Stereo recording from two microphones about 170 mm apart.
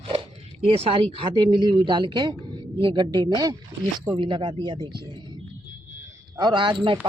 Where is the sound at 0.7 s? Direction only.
35° right (ahead or behind).